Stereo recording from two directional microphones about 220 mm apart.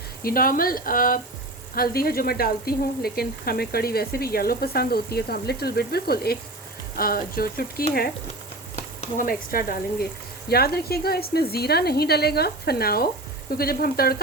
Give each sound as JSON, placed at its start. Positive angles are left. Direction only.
{"t": 0.2, "sound": "speech", "side_deg": 40}
{"t": 9.0, "sound": "speech", "side_deg": 40}